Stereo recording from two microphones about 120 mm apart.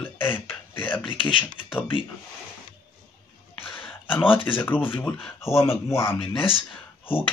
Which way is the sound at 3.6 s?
15° left (ahead or behind).